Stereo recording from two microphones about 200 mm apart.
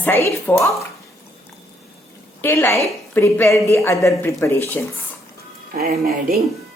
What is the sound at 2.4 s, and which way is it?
A woman's voice, 15° left (ahead or behind).